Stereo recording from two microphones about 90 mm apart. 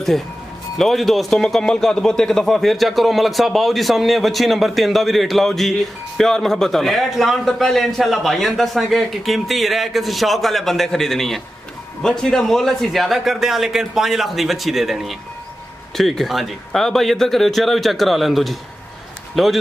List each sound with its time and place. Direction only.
0.7 s a man's voice: centre (ahead or behind)